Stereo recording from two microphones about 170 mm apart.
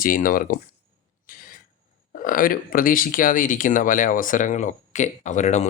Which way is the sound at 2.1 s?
55° left (ahead or behind).